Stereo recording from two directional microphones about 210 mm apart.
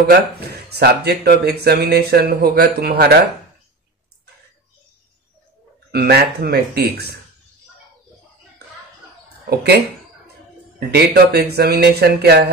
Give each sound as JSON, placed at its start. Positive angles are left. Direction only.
{"t": 0.0, "sound": "speech", "side_deg": -50}
{"t": 5.9, "sound": "speech", "side_deg": -50}
{"t": 9.5, "sound": "speech", "side_deg": -50}
{"t": 10.9, "sound": "speech", "side_deg": -50}